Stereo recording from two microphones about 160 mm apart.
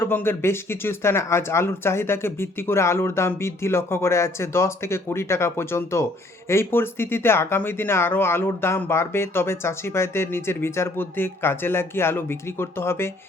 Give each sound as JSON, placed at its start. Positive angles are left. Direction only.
{"t": 0.0, "sound": "speech", "side_deg": 15}